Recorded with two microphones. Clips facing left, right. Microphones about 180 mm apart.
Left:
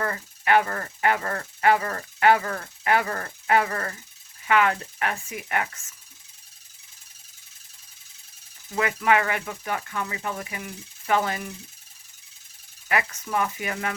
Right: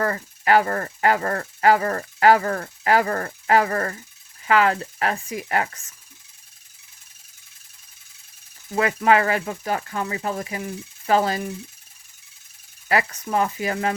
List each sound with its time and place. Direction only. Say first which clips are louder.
0.0 s speech: right 5 dB; 40° right (ahead or behind)
8.7 s speech: right 4 dB; 35° right (ahead or behind)
12.9 s speech: right 4 dB; 35° right (ahead or behind)